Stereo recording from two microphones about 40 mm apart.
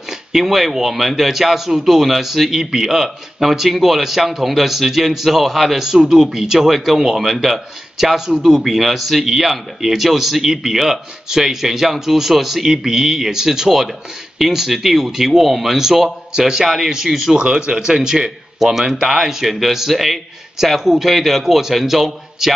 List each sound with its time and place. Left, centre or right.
0.3 s speech: centre
18.8 s a man's voice: centre